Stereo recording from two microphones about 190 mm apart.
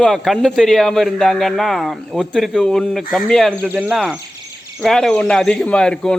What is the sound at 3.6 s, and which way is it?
A man's voice, 10° right (ahead or behind).